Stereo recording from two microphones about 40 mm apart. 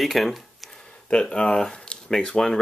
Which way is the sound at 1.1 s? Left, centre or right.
Left.